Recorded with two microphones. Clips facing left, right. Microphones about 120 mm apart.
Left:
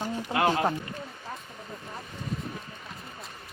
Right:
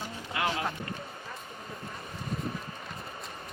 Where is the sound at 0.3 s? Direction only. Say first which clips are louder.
Left 6 dB; 45° left (ahead or behind).